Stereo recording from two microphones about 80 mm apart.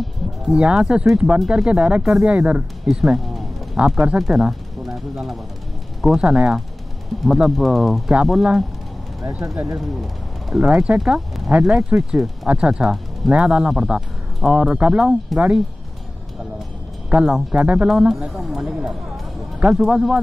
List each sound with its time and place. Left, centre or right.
0.0 s speech: centre
10.7 s speech: centre
11.0 s speech: centre
17.1 s speech: centre
17.6 s speech: centre
17.8 s speech: centre